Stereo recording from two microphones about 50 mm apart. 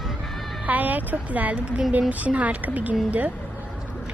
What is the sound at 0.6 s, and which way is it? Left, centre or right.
Speech, right.